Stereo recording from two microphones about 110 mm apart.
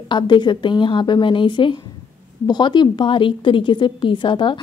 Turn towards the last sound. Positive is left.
turn(degrees=45)  # may be behind; listen again after turning